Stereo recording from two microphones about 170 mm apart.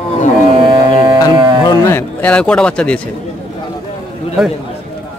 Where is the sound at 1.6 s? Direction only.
20° left (ahead or behind).